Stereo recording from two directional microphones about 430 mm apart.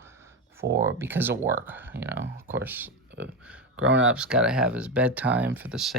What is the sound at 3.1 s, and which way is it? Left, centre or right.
Speech, right.